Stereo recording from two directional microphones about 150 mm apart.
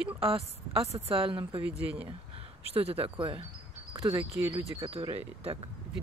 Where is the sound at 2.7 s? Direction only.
40° right (ahead or behind).